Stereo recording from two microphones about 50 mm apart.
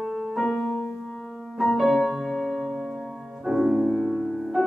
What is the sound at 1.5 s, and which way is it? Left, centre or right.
Music, centre.